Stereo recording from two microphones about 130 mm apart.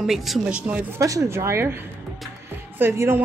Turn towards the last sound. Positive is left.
turn(degrees=-15)  # may be behind; listen again after turning